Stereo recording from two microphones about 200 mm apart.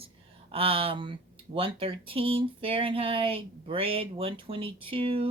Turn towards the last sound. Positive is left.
turn(degrees=-25)  # may be behind; listen again after turning